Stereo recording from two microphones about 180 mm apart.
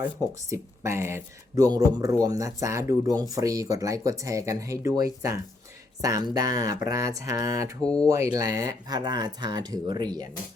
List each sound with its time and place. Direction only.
0.0 s speech: 15° right (ahead or behind)
7.8 s speech: 5° left (ahead or behind)
8.0 s speech: 20° right (ahead or behind)